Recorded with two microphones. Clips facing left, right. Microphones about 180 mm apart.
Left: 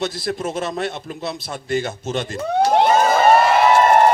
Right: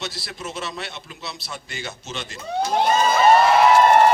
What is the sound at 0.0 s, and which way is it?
A man's voice, 50° left (ahead or behind).